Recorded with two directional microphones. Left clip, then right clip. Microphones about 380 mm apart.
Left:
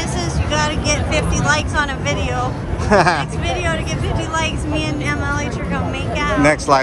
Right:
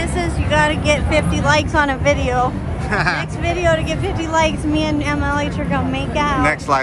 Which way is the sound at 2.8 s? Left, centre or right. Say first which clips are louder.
Left 5 dB; centre.